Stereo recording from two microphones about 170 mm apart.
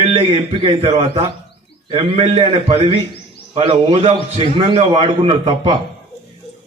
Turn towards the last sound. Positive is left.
turn(degrees=-30)  # may be behind; listen again after turning